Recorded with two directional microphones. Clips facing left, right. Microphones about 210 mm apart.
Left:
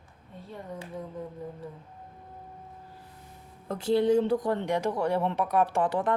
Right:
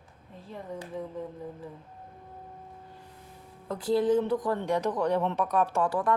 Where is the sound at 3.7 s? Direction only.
25° left (ahead or behind).